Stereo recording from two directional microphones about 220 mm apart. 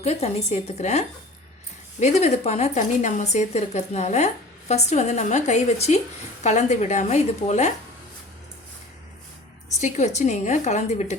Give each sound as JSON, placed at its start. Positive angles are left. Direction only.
{"t": 0.0, "sound": "a woman's voice", "side_deg": 30}
{"t": 9.8, "sound": "a woman's voice", "side_deg": 30}